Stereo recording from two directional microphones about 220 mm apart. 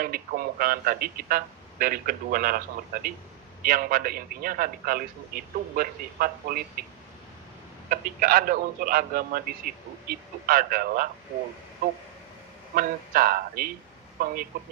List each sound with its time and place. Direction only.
0.0 s a man's voice: 40° right (ahead or behind)
7.9 s a man's voice: 40° right (ahead or behind)
12.7 s a man's voice: 40° right (ahead or behind)